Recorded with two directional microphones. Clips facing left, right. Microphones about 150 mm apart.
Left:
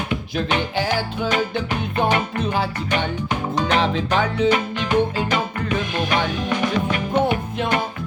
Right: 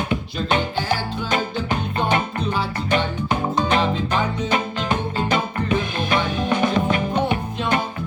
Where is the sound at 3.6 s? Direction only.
80° left.